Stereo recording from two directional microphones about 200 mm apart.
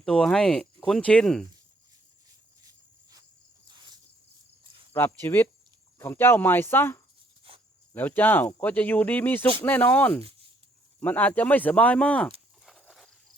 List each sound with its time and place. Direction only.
0.0 s speech: 5° left (ahead or behind)
3.7 s cricket: 20° right (ahead or behind)
4.9 s speech: 10° left (ahead or behind)
7.5 s cricket: 25° right (ahead or behind)
7.9 s speech: 10° left (ahead or behind)
12.6 s a sound: centre (ahead or behind)